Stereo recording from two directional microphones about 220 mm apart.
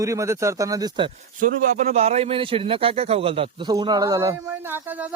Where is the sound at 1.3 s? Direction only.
35° right (ahead or behind); by 4.8 s 15° right (ahead or behind).